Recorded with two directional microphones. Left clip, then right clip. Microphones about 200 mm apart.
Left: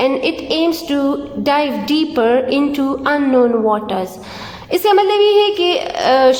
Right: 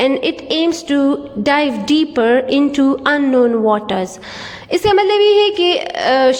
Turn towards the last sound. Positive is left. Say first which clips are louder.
# left 1 dB
turn(degrees=-25)  # may be behind; listen again after turning